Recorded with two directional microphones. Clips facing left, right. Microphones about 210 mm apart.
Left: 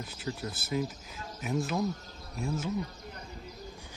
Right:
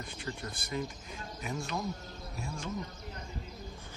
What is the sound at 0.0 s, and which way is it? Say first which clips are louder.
Speech: left 3 dB; 5° left (ahead or behind).